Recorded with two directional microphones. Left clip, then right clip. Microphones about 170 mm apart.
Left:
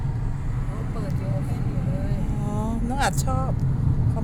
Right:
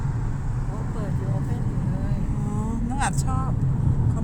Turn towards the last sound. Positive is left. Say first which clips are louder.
# left 2 dB
turn(degrees=15)  # may be behind; listen again after turning